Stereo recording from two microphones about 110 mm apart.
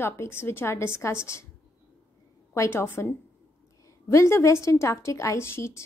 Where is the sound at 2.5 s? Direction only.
20° left (ahead or behind).